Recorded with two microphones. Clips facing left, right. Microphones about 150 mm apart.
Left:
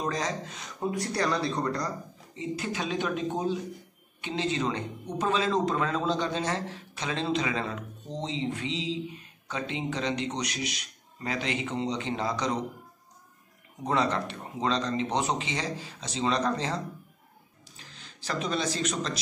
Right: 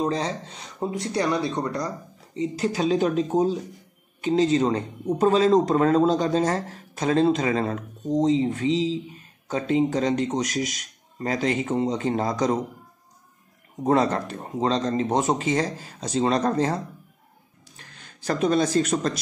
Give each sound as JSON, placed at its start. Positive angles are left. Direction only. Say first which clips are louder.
{"t": 0.0, "sound": "speech", "louder": "right 5 dB", "side_deg": -30}
{"t": 2.3, "sound": "speech", "louder": "right 7 dB", "side_deg": -35}
{"t": 13.8, "sound": "speech", "louder": "right 6 dB", "side_deg": -45}